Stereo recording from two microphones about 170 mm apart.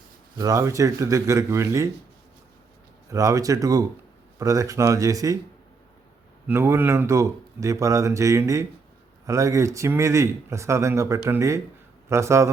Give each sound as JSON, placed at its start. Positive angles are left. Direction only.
{"t": 0.3, "sound": "speech", "side_deg": -20}
{"t": 3.1, "sound": "speech", "side_deg": -20}
{"t": 6.5, "sound": "speech", "side_deg": -15}